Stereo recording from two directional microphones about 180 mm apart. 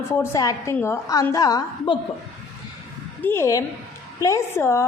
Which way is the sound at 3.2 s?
10° left (ahead or behind).